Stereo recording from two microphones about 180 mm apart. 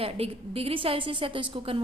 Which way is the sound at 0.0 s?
30° right (ahead or behind).